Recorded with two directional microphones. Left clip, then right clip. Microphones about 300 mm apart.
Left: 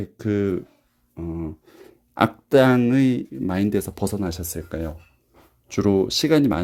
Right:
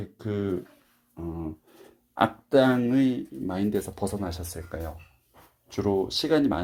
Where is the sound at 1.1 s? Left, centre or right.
Left.